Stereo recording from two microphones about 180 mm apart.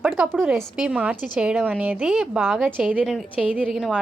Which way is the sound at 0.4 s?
5° right (ahead or behind).